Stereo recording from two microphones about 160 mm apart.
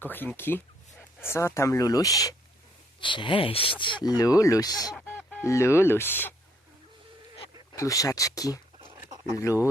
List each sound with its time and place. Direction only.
0.0 s speech: 10° left (ahead or behind)
5.0 s speech: 10° left (ahead or behind)
7.8 s speech: 20° left (ahead or behind)